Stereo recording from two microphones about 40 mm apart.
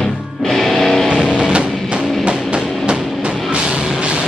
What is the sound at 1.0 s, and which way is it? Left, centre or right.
Music, centre.